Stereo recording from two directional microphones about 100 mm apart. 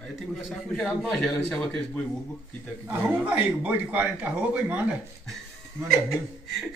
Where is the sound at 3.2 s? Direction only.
15° right (ahead or behind).